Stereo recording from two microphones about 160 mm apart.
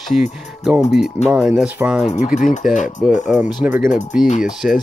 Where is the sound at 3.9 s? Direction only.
Centre (ahead or behind).